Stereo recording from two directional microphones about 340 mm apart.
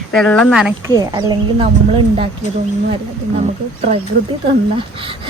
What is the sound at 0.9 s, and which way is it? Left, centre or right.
Speech, centre.